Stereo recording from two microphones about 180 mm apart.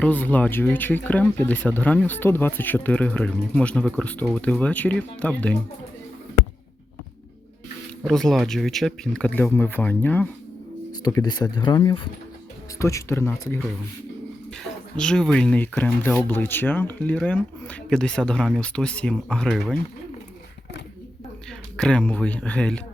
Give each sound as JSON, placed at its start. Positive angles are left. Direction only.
{"t": 0.0, "sound": "speech", "side_deg": 10}
{"t": 8.0, "sound": "speech", "side_deg": 0}
{"t": 11.0, "sound": "speech", "side_deg": 20}
{"t": 14.9, "sound": "speech", "side_deg": 5}
{"t": 21.8, "sound": "speech", "side_deg": 5}